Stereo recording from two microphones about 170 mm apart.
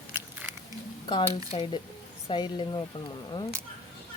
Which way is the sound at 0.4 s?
15° right (ahead or behind).